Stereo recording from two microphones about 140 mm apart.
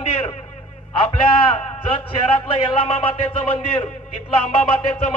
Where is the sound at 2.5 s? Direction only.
40° left (ahead or behind).